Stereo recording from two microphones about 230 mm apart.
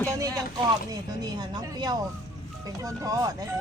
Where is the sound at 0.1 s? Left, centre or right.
Centre.